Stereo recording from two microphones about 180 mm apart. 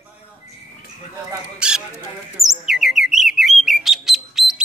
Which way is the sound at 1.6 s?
5° right (ahead or behind).